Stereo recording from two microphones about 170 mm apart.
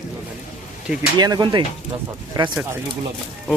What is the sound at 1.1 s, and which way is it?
Speech, 25° right (ahead or behind).